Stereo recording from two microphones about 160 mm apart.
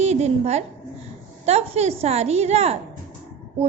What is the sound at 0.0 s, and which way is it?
A woman's voice, 40° right (ahead or behind).